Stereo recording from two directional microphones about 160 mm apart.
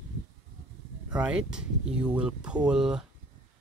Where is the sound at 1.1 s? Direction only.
5° right (ahead or behind).